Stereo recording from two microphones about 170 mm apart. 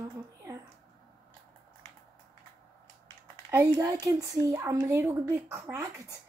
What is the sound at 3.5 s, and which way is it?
Speech, 15° right (ahead or behind).